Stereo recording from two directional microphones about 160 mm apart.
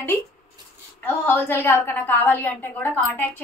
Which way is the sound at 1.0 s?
10° left (ahead or behind).